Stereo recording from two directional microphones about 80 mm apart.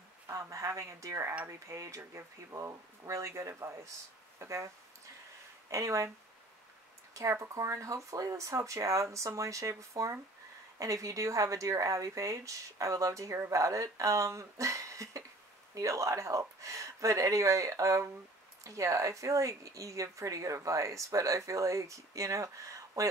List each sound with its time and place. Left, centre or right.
0.3 s speech: right
5.7 s speech: right
7.2 s speech: right